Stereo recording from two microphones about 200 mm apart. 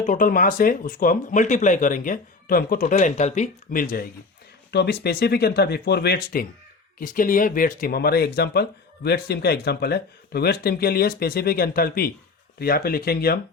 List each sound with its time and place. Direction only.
0.0 s speech: 40° left (ahead or behind)